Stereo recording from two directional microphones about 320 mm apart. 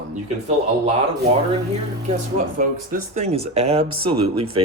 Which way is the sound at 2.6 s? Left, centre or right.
Right.